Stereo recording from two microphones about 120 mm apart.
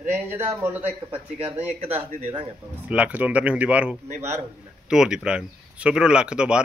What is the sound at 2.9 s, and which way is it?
Speech, 10° right (ahead or behind).